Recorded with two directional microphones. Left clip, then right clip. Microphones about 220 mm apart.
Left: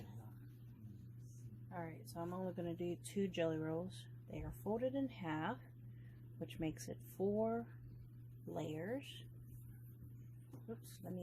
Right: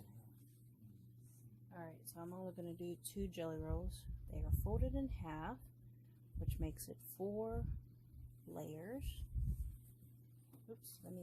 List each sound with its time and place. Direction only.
1.7 s speech: 20° right (ahead or behind)
6.6 s speech: 20° right (ahead or behind)
11.0 s speech: 20° right (ahead or behind)